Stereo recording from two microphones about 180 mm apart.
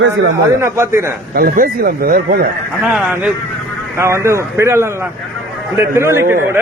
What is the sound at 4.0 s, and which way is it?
A man's voice, 15° right (ahead or behind).